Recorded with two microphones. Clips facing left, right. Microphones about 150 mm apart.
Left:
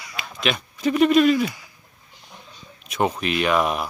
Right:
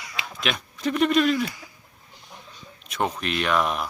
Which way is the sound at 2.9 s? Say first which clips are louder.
Left 4 dB; 5° left (ahead or behind).